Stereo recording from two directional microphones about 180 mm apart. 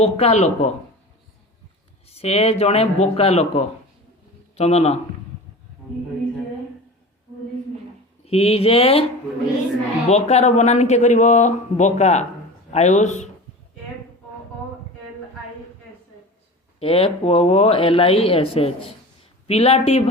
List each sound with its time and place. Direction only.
0.0 s speech: 35° left (ahead or behind)
2.0 s speech: 35° left (ahead or behind)
8.2 s speech: 35° left (ahead or behind)
10.1 s speech: 35° left (ahead or behind)
16.8 s speech: 35° left (ahead or behind)